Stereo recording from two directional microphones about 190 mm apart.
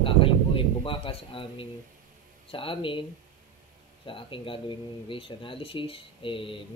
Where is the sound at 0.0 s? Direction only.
30° left (ahead or behind).